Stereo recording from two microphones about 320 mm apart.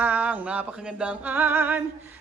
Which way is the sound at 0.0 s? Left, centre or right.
Centre.